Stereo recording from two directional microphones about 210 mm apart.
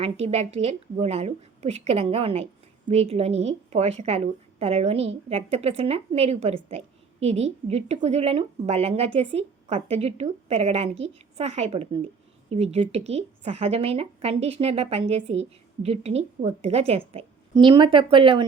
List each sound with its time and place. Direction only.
0.0 s a woman's voice: 30° right (ahead or behind)